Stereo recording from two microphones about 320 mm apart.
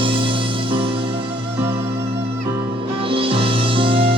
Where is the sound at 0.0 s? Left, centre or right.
Centre.